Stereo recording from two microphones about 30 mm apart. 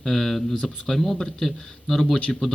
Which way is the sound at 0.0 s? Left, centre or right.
Centre.